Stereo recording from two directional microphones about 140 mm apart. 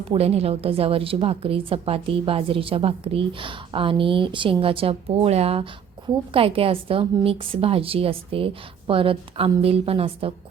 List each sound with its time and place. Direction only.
0.0 s a woman's voice: 45° right (ahead or behind)